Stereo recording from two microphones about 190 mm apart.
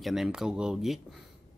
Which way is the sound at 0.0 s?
Centre (ahead or behind).